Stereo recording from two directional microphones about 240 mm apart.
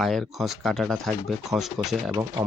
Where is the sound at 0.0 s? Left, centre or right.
Centre.